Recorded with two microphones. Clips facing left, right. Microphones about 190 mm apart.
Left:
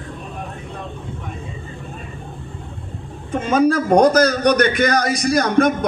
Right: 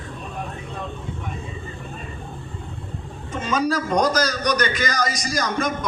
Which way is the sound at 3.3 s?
55° left (ahead or behind).